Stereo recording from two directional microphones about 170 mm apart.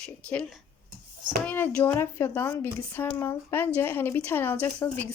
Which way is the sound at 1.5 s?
10° left (ahead or behind).